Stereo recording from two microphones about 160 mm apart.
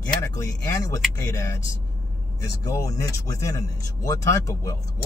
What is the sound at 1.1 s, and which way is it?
Speech, 20° left (ahead or behind).